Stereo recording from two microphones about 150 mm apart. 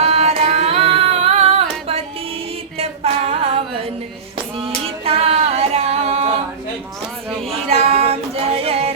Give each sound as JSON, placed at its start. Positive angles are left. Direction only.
{"t": 0.0, "sound": "carnatic music", "side_deg": -45}
{"t": 1.2, "sound": "music", "side_deg": -40}
{"t": 2.7, "sound": "female singing", "side_deg": -40}
{"t": 4.5, "sound": "singing", "side_deg": -40}
{"t": 7.4, "sound": "a sound", "side_deg": -40}